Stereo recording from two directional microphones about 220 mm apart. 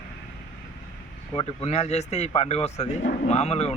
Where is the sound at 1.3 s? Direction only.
25° left (ahead or behind).